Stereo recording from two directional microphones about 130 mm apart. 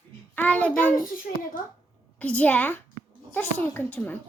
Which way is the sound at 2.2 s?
10° left (ahead or behind).